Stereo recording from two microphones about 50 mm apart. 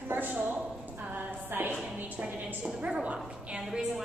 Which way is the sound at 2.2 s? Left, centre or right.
Right.